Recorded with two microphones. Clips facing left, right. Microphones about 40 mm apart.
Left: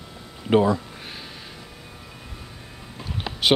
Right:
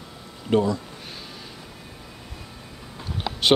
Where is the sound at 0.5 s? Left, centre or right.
Left.